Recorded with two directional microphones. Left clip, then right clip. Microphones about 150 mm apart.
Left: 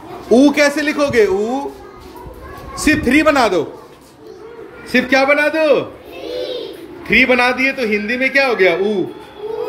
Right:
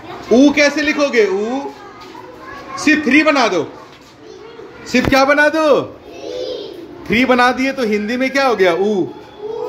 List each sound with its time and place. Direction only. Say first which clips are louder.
0.3 s speech: even; 5° left (ahead or behind)
2.7 s speech: right 1 dB; 10° left (ahead or behind)
4.9 s a man's voice: right 1 dB; 10° right (ahead or behind)
7.1 s a man's voice: left 1 dB; 20° right (ahead or behind)